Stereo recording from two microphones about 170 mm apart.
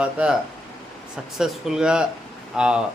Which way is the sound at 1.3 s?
5° right (ahead or behind).